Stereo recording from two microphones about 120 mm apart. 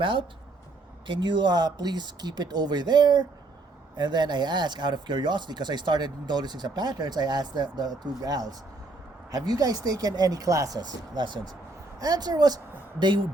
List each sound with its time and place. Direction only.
0.0 s speech: 45° right (ahead or behind)